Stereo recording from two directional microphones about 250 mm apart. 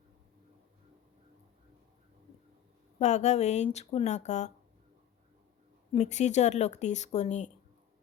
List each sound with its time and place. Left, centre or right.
3.0 s speech: left
5.9 s speech: left